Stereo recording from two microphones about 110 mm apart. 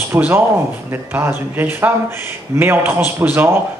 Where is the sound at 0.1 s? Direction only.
20° right (ahead or behind).